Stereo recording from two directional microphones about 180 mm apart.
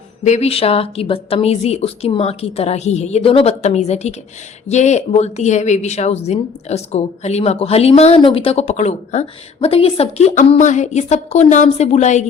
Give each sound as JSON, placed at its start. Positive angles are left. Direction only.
{"t": 0.3, "sound": "speech", "side_deg": 35}